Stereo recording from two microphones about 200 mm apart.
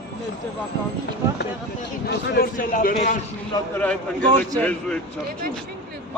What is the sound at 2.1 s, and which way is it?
A man's voice, 50° left (ahead or behind).